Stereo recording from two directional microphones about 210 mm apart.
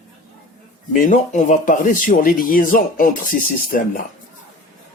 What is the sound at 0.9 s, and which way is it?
A man's voice, 40° left (ahead or behind).